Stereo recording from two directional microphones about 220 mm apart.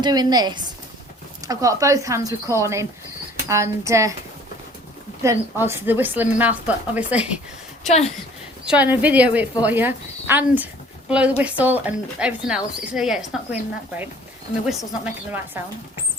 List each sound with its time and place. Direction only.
0.0 s a woman's voice: 20° right (ahead or behind)
5.2 s a woman's voice: 10° right (ahead or behind)
7.9 s a woman's voice: 30° left (ahead or behind)
8.6 s a woman's voice: 5° right (ahead or behind)